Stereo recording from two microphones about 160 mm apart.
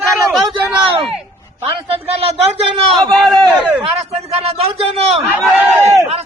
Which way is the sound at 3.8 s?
40° right (ahead or behind).